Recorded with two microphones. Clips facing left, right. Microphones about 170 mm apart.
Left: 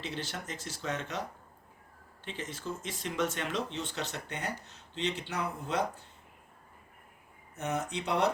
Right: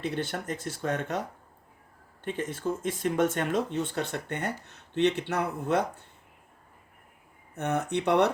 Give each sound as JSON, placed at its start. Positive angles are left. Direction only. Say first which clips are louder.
{"t": 0.0, "sound": "speech", "louder": "right 7 dB", "side_deg": -55}
{"t": 2.2, "sound": "speech", "louder": "right 8 dB", "side_deg": -50}
{"t": 7.5, "sound": "speech", "louder": "right 6 dB", "side_deg": -60}